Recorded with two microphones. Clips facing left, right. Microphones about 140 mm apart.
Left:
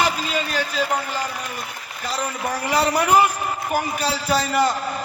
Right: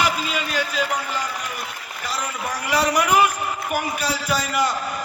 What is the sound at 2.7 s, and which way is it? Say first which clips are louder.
Speech: left 1 dB; 30° left (ahead or behind).